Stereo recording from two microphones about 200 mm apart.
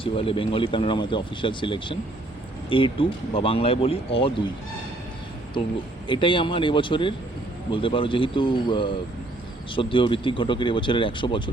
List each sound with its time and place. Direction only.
0.0 s speech: 25° left (ahead or behind)
6.1 s speech: 25° left (ahead or behind)